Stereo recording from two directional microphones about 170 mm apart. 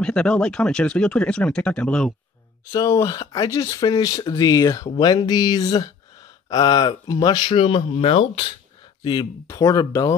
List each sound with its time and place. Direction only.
0.0 s speech: 5° left (ahead or behind)
2.7 s speech: 20° left (ahead or behind)